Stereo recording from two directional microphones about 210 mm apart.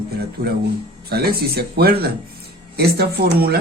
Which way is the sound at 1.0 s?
45° right (ahead or behind).